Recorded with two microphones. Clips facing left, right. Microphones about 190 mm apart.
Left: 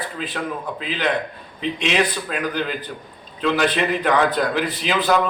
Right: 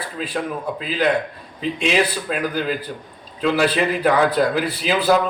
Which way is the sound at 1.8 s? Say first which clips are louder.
Right 2 dB; 5° right (ahead or behind).